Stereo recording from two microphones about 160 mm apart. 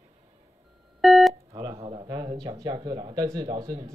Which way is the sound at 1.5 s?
25° right (ahead or behind).